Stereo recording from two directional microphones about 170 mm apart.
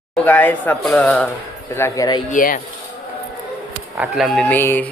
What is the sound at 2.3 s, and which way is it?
Speech, 50° left (ahead or behind).